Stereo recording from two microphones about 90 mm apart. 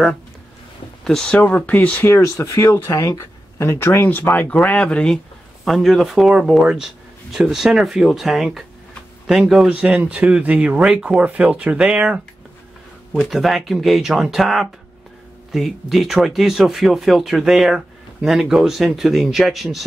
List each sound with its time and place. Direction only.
1.0 s speech: 5° left (ahead or behind)
9.7 s speech: 15° right (ahead or behind)
13.2 s speech: centre (ahead or behind)